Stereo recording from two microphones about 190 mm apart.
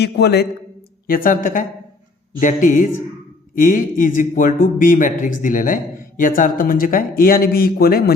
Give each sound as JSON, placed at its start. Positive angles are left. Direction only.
{"t": 0.0, "sound": "a man's voice", "side_deg": 60}
{"t": 1.0, "sound": "a man's voice", "side_deg": 50}